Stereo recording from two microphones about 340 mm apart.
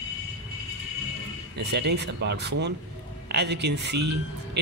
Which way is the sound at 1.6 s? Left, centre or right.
Right.